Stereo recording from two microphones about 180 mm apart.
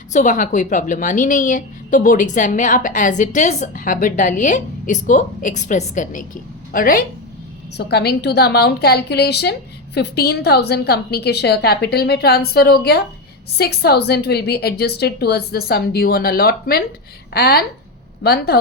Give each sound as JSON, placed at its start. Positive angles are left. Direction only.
{"t": 0.1, "sound": "a woman's voice", "side_deg": 40}
{"t": 7.8, "sound": "a woman's voice", "side_deg": 65}